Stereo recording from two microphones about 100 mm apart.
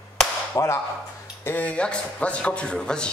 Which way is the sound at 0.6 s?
35° left (ahead or behind).